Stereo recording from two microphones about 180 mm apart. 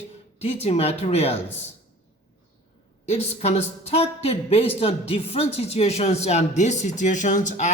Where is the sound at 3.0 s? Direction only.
35° left (ahead or behind).